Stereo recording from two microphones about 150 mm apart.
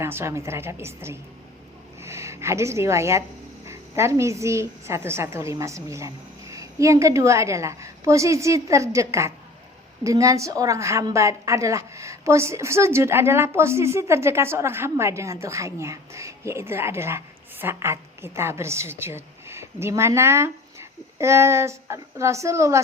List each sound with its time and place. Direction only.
0.0 s a woman's voice: 15° right (ahead or behind)